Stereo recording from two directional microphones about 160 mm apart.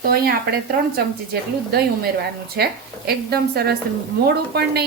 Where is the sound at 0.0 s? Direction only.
70° right (ahead or behind).